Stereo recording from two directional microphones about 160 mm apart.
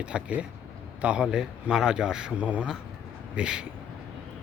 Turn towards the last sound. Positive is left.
turn(degrees=-5)  # may be behind; listen again after turning